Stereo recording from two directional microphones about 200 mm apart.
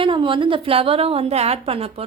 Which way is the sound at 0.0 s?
25° right (ahead or behind).